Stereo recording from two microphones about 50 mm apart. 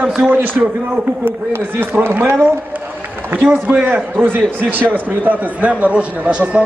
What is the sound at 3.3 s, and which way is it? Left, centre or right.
A man's voice, right.